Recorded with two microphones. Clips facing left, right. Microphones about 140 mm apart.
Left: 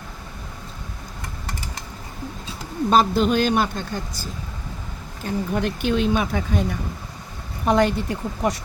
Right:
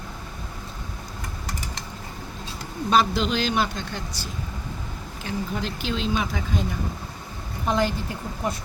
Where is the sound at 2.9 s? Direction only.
45° left (ahead or behind).